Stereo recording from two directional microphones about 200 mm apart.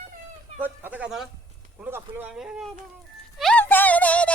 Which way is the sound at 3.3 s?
5° left (ahead or behind).